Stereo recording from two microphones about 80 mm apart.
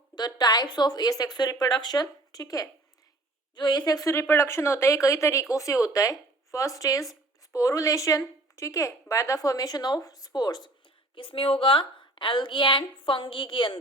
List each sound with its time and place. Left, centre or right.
0.2 s speech: left
3.5 s speech: left
4.1 s a woman's voice: left
11.1 s a woman's voice: left